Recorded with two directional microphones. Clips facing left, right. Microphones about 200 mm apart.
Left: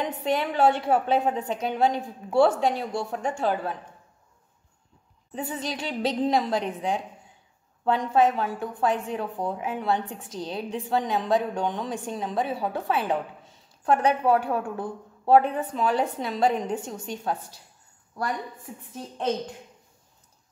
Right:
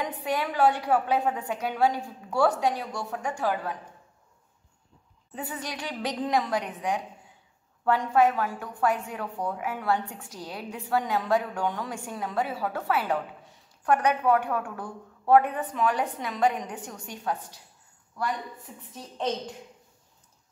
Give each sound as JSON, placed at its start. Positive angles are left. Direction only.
{"t": 0.0, "sound": "a woman's voice", "side_deg": 25}
{"t": 5.3, "sound": "a woman's voice", "side_deg": 20}
{"t": 8.1, "sound": "a woman's voice", "side_deg": 20}